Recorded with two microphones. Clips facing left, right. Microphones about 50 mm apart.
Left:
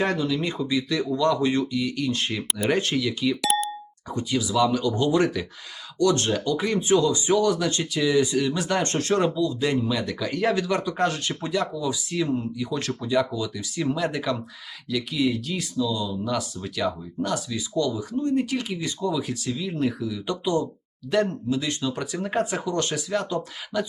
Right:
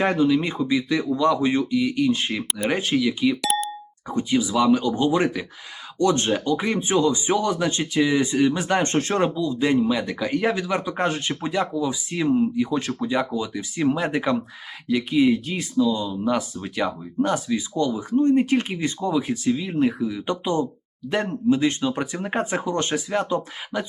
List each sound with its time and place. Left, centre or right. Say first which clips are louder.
0.0 s speech: right 5 dB; centre
3.4 s plop: even; centre
4.1 s speech: right 3 dB; right